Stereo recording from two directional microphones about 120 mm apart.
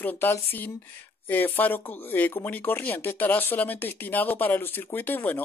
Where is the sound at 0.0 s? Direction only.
15° left (ahead or behind).